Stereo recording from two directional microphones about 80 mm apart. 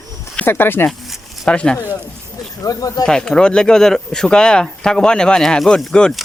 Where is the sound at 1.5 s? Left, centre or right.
Centre.